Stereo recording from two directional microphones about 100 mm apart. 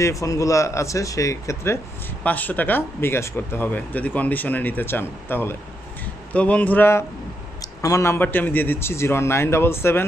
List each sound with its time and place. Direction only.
0.0 s speech: 35° left (ahead or behind)
2.2 s a man's voice: 15° left (ahead or behind)
8.2 s a man's voice: 20° left (ahead or behind)